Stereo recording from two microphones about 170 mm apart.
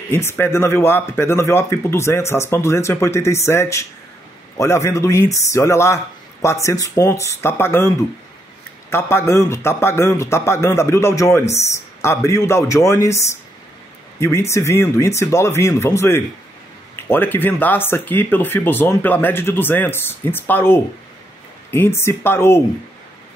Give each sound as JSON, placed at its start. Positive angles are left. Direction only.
{"t": 0.1, "sound": "speech", "side_deg": 15}
{"t": 8.9, "sound": "speech", "side_deg": 15}